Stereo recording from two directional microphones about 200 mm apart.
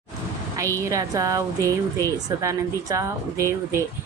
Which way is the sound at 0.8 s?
15° right (ahead or behind).